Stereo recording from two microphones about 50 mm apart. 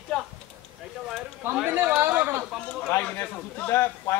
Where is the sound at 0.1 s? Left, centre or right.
Centre.